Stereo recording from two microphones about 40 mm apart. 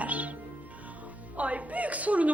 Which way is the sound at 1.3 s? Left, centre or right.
Right.